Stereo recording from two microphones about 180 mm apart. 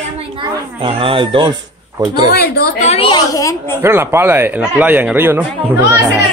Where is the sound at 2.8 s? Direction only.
30° left (ahead or behind).